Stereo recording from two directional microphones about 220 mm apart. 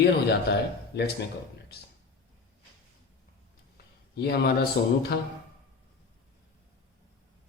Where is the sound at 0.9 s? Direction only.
45° left (ahead or behind).